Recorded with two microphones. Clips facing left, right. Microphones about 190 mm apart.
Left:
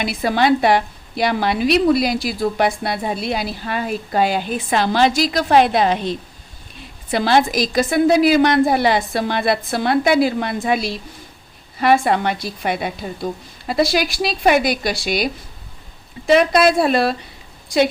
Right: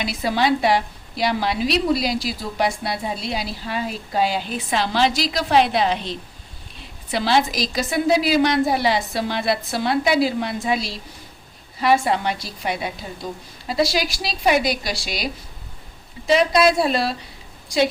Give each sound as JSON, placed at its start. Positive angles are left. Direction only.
{"t": 0.0, "sound": "a woman's voice", "side_deg": 55}